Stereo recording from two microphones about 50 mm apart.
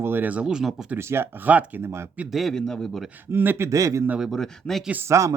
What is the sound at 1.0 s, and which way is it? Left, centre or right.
Speech, right.